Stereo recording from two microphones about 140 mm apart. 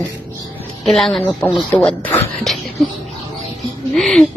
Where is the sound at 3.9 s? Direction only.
5° left (ahead or behind).